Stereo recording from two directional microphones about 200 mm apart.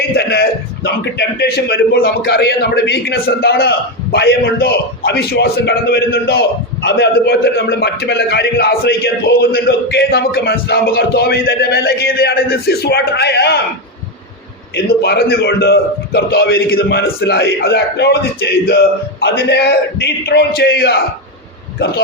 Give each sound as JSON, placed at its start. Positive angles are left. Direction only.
{"t": 0.2, "sound": "a man's voice", "side_deg": 55}
{"t": 15.0, "sound": "a man's voice", "side_deg": 55}